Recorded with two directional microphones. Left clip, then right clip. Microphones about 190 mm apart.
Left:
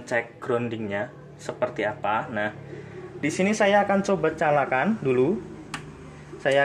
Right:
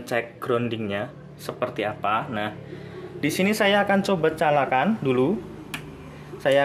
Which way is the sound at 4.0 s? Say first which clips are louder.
Right 1 dB; 25° right (ahead or behind).